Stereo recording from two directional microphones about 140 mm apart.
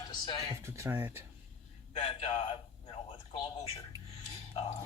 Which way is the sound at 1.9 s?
40° left (ahead or behind).